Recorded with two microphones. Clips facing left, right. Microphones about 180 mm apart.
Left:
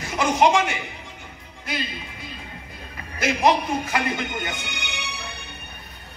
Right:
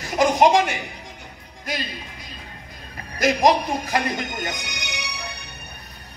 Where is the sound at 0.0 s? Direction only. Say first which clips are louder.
Right 3 dB; 40° right (ahead or behind).